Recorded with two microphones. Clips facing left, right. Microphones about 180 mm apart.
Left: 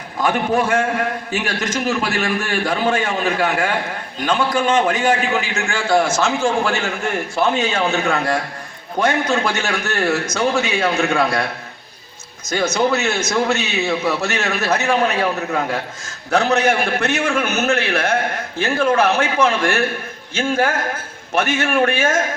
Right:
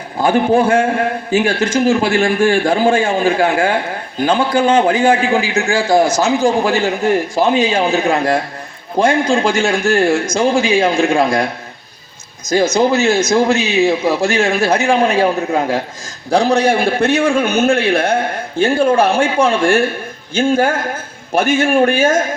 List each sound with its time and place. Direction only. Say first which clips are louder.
0.2 s a man's voice: right 6 dB; 30° right (ahead or behind)
12.5 s a man's voice: right 5 dB; 35° right (ahead or behind)